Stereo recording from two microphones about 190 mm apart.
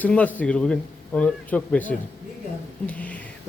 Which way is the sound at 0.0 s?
5° left (ahead or behind).